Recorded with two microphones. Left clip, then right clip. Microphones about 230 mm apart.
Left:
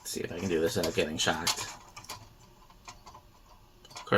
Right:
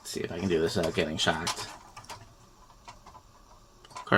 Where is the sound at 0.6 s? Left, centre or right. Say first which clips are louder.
Even; right.